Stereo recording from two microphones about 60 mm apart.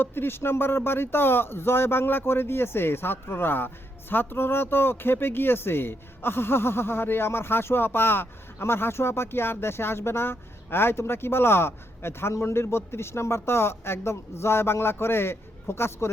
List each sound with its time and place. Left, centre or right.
0.0 s speech: left